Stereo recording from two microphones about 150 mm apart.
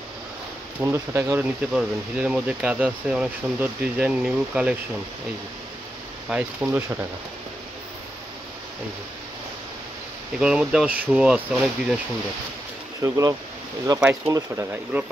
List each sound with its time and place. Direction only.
0.7 s speech: 15° right (ahead or behind)
6.2 s speech: 10° right (ahead or behind)
10.4 s speech: 5° right (ahead or behind)
13.0 s speech: 20° right (ahead or behind)